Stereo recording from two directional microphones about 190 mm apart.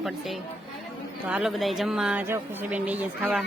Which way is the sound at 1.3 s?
Centre (ahead or behind).